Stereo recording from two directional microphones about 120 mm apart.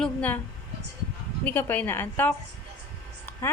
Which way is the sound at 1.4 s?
15° left (ahead or behind).